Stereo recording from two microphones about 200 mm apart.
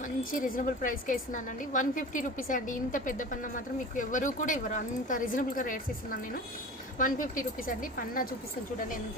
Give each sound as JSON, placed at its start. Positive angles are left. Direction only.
{"t": 0.0, "sound": "a woman's voice", "side_deg": 45}